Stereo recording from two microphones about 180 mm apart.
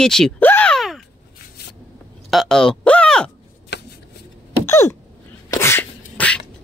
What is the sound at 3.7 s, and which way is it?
Shuffling cards, 75° left (ahead or behind).